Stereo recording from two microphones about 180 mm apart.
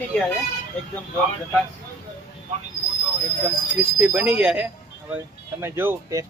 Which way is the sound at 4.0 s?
10° right (ahead or behind).